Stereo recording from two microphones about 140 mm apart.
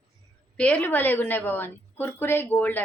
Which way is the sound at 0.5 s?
10° left (ahead or behind).